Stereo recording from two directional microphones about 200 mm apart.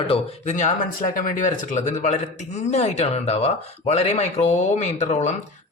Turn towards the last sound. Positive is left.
turn(degrees=35)  # may be behind; listen again after turning